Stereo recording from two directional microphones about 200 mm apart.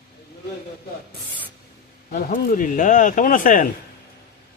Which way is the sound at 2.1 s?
50° left (ahead or behind).